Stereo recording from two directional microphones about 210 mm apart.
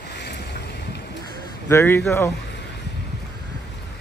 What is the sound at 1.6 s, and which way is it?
Speech, 10° left (ahead or behind).